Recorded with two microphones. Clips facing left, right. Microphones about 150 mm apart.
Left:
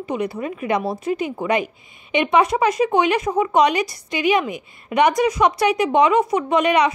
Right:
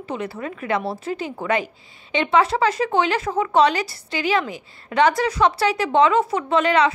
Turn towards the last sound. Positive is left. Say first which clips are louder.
# left 1 dB
turn(degrees=15)  # may be behind; listen again after turning